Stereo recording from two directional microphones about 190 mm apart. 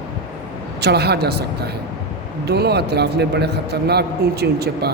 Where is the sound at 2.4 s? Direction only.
60° right (ahead or behind).